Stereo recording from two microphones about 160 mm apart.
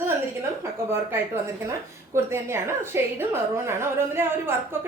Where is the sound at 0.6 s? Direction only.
15° right (ahead or behind).